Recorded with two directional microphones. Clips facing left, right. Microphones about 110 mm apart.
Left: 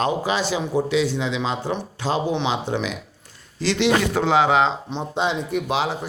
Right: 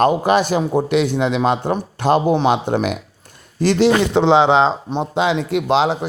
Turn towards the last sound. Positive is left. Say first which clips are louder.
# right 7 dB
turn(degrees=-65)  # may be behind; listen again after turning